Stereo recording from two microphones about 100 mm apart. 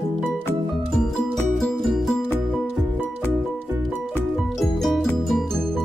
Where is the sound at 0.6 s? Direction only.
Centre (ahead or behind).